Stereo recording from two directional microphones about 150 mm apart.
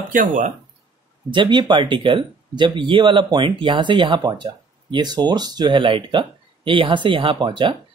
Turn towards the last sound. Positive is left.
turn(degrees=-30)  # may be behind; listen again after turning